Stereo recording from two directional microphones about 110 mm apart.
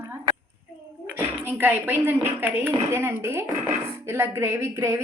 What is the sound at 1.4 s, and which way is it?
A woman's voice, 20° right (ahead or behind).